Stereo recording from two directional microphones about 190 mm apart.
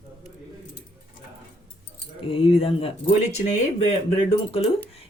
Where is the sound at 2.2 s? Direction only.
30° left (ahead or behind).